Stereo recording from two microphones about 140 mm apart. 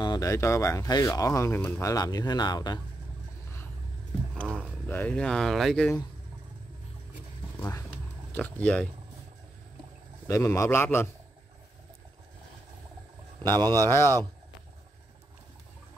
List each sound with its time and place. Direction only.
0.0 s speech: 25° left (ahead or behind)
4.4 s a sound: 5° left (ahead or behind)
4.8 s speech: 10° left (ahead or behind)
7.5 s speech: 15° left (ahead or behind)
10.2 s speech: 20° left (ahead or behind)
13.7 s speech: 15° left (ahead or behind)